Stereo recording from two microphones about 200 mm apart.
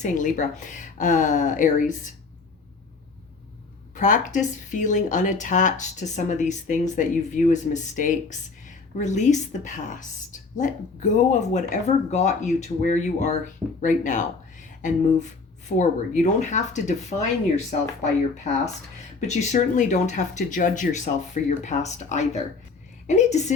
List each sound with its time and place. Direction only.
0.0 s speech: 40° left (ahead or behind)
3.9 s speech: 40° left (ahead or behind)
19.2 s speech: 35° left (ahead or behind)